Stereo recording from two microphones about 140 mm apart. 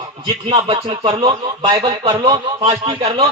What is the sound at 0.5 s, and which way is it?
Speech, 45° right (ahead or behind).